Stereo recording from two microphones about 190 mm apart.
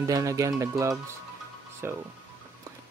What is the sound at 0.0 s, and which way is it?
Speech, 15° right (ahead or behind).